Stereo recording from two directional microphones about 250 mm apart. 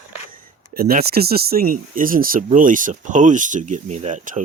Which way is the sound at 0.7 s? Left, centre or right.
Right.